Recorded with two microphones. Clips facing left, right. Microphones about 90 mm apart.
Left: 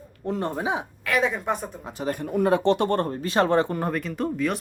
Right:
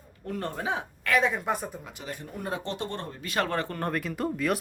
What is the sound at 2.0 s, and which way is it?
Speech, 45° left (ahead or behind).